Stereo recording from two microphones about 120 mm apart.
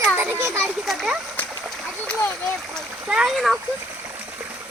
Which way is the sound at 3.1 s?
5° right (ahead or behind).